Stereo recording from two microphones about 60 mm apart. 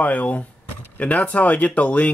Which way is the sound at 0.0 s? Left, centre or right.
Left.